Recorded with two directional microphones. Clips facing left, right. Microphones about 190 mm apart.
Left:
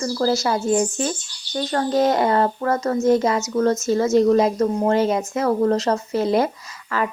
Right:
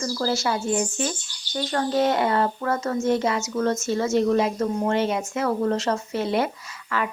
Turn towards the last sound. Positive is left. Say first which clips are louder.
# left 3 dB
turn(degrees=40)  # may be behind; listen again after turning